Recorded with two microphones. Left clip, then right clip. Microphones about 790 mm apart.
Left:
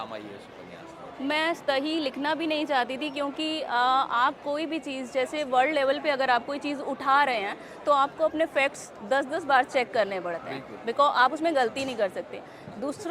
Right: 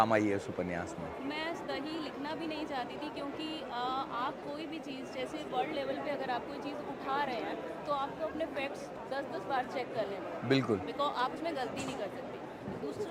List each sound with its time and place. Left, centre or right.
1.3 s a woman's voice: left